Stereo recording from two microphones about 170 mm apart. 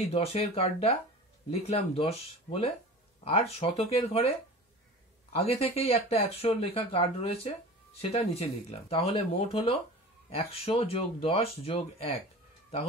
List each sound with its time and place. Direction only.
0.0 s speech: 35° left (ahead or behind)